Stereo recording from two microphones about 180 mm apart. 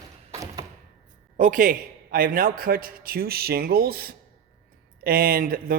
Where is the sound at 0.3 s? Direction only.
20° right (ahead or behind).